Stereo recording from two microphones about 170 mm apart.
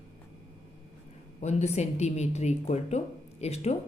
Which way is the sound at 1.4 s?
40° left (ahead or behind).